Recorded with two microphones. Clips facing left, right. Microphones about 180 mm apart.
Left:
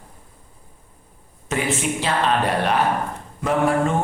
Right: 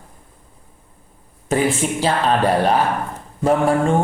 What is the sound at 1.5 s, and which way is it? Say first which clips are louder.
Mantra: right 4 dB; 35° right (ahead or behind).